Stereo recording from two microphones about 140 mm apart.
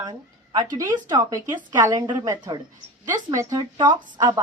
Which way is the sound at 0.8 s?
25° right (ahead or behind).